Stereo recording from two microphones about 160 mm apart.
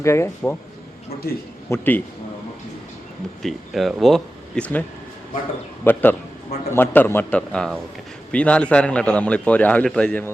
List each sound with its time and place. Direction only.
0.0 s a man's voice: 15° left (ahead or behind)
1.1 s a man's voice: 70° left (ahead or behind)
1.7 s a man's voice: 10° left (ahead or behind)
3.4 s speech: centre (ahead or behind)
5.8 s a man's voice: 10° left (ahead or behind)